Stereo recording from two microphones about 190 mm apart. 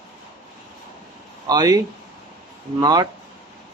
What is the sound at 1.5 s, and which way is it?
A man's voice, 20° right (ahead or behind).